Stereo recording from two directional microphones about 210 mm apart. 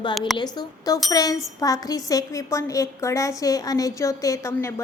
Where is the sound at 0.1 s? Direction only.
Centre (ahead or behind).